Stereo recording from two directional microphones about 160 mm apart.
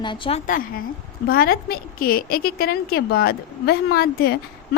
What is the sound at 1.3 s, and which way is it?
A woman's voice, 70° left (ahead or behind).